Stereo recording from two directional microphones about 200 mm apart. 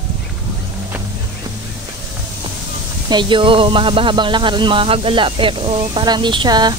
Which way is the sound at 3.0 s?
25° right (ahead or behind).